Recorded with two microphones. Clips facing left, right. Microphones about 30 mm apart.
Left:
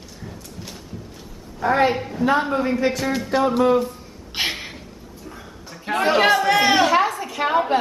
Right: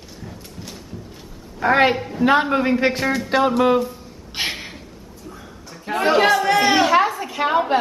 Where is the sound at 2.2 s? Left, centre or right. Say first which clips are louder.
Right 3 dB; right.